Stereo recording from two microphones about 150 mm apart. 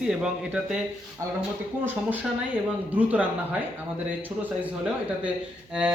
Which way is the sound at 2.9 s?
10° right (ahead or behind).